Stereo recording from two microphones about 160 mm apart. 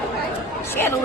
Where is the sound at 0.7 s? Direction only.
15° left (ahead or behind).